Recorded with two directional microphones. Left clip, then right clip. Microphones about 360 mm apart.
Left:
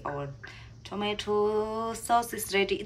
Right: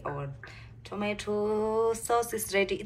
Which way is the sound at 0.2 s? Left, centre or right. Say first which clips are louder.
Left 2 dB; centre.